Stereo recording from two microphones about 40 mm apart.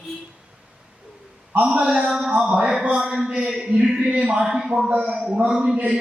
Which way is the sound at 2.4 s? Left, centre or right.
Centre.